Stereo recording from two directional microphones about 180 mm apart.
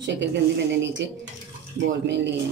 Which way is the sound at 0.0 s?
75° right (ahead or behind).